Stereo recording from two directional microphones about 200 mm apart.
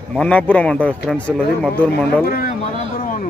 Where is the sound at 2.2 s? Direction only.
45° left (ahead or behind).